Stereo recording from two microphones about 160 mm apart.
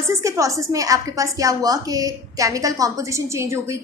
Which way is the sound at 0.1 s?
20° right (ahead or behind).